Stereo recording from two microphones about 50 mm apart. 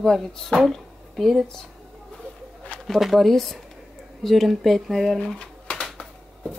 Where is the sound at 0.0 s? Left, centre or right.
Centre.